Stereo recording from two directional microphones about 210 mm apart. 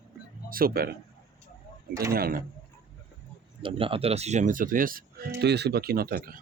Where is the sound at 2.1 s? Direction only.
45° right (ahead or behind).